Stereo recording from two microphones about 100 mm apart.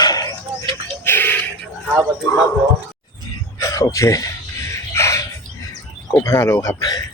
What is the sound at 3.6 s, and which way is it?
Speech, 35° left (ahead or behind).